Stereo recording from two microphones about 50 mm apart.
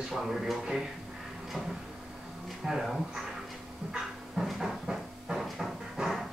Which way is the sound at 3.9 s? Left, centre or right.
Centre.